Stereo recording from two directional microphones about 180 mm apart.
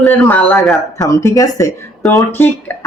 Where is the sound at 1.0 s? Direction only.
20° left (ahead or behind).